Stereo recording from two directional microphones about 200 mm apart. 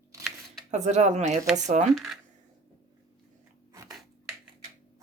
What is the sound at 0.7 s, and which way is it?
Speech, 35° right (ahead or behind).